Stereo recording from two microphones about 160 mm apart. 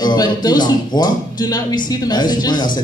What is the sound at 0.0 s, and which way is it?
A man's voice, 25° left (ahead or behind).